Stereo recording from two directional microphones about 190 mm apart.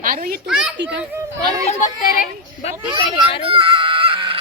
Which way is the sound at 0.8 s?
70° right (ahead or behind).